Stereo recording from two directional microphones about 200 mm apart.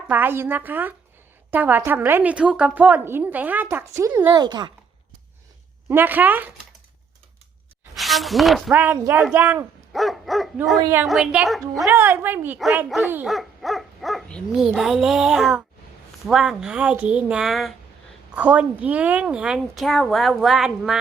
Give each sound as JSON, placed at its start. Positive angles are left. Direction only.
{"t": 0.1, "sound": "a woman's voice", "side_deg": -10}
{"t": 5.9, "sound": "a woman's voice", "side_deg": -10}
{"t": 7.9, "sound": "a woman's voice", "side_deg": 0}
{"t": 10.8, "sound": "a woman's voice", "side_deg": -15}
{"t": 11.0, "sound": "a woman's voice", "side_deg": -5}